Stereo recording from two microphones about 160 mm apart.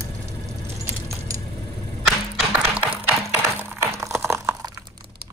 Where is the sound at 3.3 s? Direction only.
15° right (ahead or behind).